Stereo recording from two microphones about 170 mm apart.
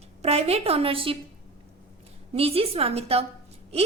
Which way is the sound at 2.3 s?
35° right (ahead or behind).